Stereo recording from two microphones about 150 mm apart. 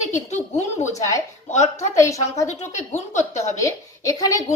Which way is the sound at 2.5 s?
50° left (ahead or behind).